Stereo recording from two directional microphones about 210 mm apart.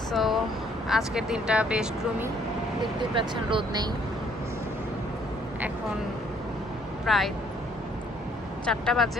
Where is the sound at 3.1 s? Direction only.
25° right (ahead or behind).